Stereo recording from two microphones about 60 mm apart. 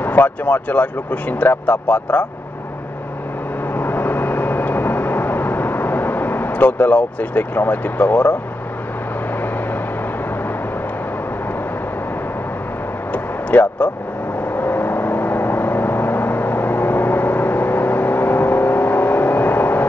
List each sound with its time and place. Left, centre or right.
0.0 s speech: left
3.7 s vehicle: left
13.1 s vehicle: left